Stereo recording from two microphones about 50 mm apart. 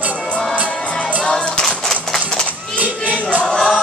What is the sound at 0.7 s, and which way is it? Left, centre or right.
Music, centre.